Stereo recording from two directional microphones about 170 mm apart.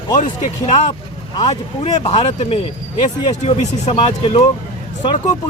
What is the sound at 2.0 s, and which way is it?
Speech, 35° left (ahead or behind).